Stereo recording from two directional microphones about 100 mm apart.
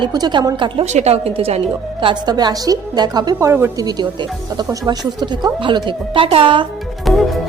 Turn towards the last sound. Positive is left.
turn(degrees=0)  # may be behind; listen again after turning